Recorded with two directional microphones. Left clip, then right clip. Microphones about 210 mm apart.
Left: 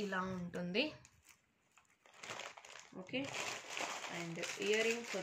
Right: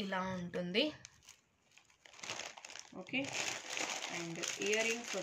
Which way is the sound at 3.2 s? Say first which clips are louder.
Right 3 dB; 55° right (ahead or behind).